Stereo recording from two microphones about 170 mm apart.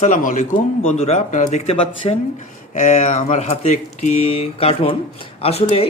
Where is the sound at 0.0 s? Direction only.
50° left (ahead or behind).